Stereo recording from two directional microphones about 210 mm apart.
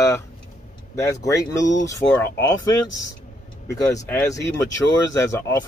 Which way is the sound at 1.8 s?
15° left (ahead or behind).